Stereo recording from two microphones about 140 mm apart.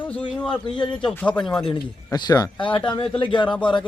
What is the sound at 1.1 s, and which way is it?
Speech, 5° left (ahead or behind).